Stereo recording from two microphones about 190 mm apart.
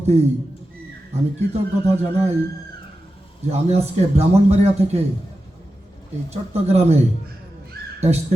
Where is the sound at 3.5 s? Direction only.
35° right (ahead or behind).